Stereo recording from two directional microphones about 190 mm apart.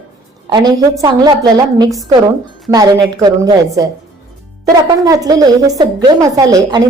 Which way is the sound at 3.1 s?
20° right (ahead or behind).